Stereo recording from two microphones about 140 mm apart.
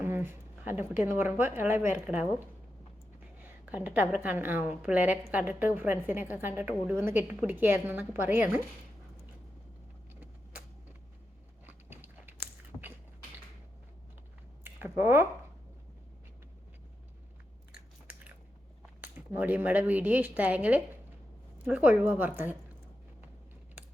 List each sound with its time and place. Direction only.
0.0 s a sound: 15° right (ahead or behind)
1.0 s a woman's voice: 15° right (ahead or behind)
11.6 s biting: 15° right (ahead or behind)
12.7 s a sound: 10° left (ahead or behind)
14.6 s speech: 15° right (ahead or behind)
17.7 s biting: 10° right (ahead or behind)
19.0 s a woman's voice: 10° right (ahead or behind)